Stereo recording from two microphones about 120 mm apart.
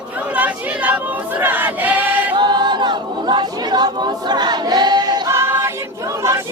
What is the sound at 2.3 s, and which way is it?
A capella, 40° right (ahead or behind).